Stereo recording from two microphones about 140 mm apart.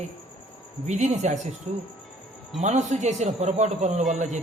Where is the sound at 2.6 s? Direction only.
55° right (ahead or behind).